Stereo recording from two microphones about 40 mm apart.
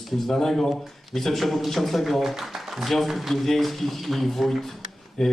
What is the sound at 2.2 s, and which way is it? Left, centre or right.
A man's voice, centre.